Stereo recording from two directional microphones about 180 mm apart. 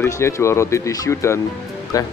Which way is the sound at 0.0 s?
15° left (ahead or behind).